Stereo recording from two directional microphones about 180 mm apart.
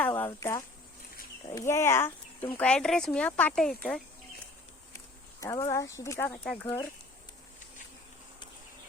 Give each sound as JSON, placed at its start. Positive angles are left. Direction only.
{"t": 0.0, "sound": "a sound", "side_deg": 10}
{"t": 0.3, "sound": "speech", "side_deg": 15}
{"t": 4.9, "sound": "speech", "side_deg": 15}